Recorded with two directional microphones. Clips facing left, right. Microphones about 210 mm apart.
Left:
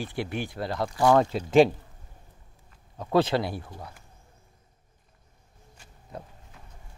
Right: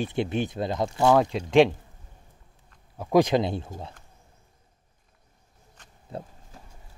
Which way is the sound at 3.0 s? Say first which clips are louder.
Right 3 dB; 15° right (ahead or behind).